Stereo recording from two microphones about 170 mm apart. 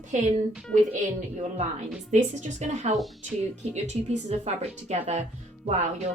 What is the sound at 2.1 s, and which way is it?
Speech, 45° right (ahead or behind).